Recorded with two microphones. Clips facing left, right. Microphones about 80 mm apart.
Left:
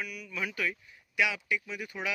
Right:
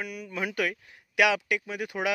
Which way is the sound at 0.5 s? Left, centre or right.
Right.